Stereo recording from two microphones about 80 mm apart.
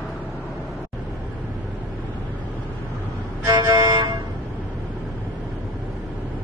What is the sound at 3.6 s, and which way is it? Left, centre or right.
Music, right.